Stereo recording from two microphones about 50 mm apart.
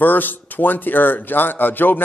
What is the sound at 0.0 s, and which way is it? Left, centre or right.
A man's voice, left.